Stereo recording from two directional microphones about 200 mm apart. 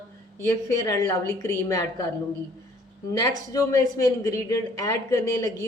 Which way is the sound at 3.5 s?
15° left (ahead or behind).